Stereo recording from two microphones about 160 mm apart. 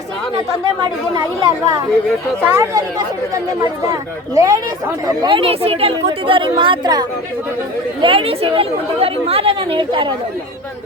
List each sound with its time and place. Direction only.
0.8 s speech: 25° right (ahead or behind)
4.4 s speech: 20° right (ahead or behind)
8.0 s speech: 35° right (ahead or behind)